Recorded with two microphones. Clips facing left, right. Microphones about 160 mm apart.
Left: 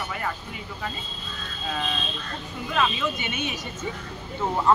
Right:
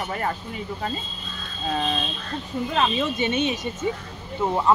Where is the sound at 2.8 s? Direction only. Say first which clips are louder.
Right 2 dB; 35° right (ahead or behind).